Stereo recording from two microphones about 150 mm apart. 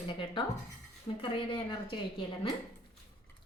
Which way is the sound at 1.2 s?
35° left (ahead or behind).